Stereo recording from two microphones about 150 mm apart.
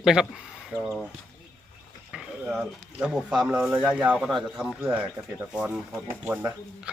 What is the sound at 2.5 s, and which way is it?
Speech, 5° right (ahead or behind).